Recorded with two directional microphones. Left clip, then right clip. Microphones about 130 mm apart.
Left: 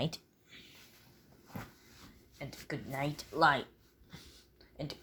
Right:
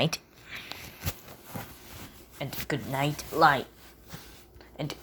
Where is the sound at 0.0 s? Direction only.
5° left (ahead or behind).